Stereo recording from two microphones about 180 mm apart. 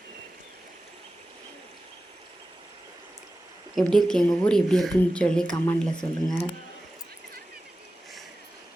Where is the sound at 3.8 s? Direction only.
Centre (ahead or behind).